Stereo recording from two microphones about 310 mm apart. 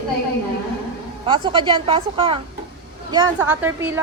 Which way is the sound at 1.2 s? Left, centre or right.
Centre.